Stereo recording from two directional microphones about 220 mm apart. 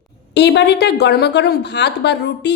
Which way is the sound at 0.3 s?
50° left (ahead or behind).